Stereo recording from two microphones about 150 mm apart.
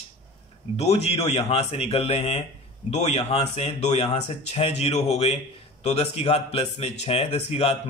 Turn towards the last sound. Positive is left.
turn(degrees=40)  # may be behind; listen again after turning